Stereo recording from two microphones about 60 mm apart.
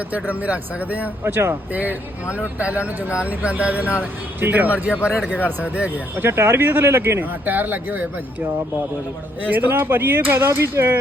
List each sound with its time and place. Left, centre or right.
0.3 s speech: right
1.2 s speech: right
1.7 s speech: right
6.2 s speech: right
9.4 s speech: right